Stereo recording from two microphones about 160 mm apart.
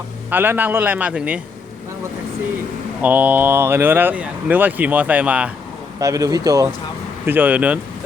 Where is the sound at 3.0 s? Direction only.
10° right (ahead or behind).